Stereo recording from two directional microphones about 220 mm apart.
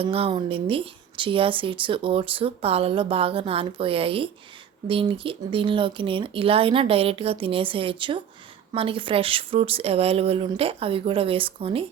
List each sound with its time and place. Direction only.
0.0 s speech: 25° right (ahead or behind)